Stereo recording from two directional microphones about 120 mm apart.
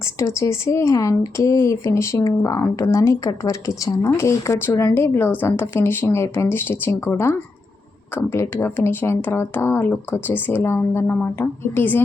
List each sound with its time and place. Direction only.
0.2 s speech: 25° left (ahead or behind)